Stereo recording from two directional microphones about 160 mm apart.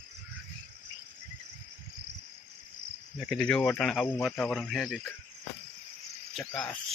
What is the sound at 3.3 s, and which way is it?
Speech, 5° left (ahead or behind).